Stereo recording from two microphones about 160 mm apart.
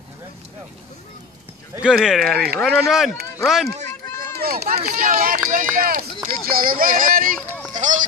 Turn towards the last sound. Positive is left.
turn(degrees=-50)  # may be behind; listen again after turning